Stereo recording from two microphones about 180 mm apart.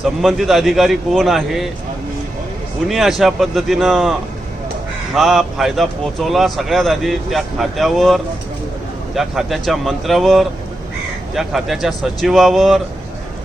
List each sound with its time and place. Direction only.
0.0 s a man's voice: centre (ahead or behind)
2.8 s a man's voice: centre (ahead or behind)
5.1 s a man's voice: centre (ahead or behind)